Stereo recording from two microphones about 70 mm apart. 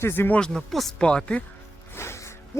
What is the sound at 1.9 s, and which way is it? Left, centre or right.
Music, left.